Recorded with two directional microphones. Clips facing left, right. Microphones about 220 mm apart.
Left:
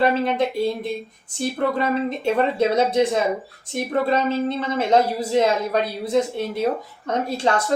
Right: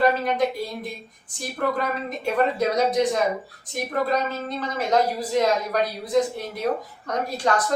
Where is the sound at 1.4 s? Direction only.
25° left (ahead or behind).